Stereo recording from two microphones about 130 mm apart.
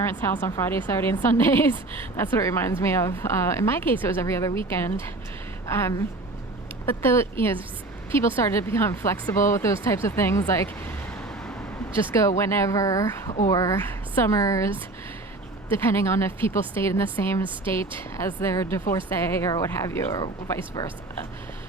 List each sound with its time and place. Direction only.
0.0 s a woman's voice: 15° left (ahead or behind)
12.4 s a woman's voice: 20° left (ahead or behind)
15.9 s a woman's voice: 20° left (ahead or behind)